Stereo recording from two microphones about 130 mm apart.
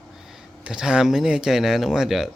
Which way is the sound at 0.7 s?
5° right (ahead or behind).